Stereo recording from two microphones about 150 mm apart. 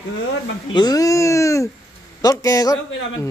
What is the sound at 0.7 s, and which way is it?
Speech, 25° left (ahead or behind).